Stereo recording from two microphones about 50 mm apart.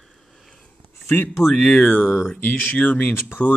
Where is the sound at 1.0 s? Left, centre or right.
Left.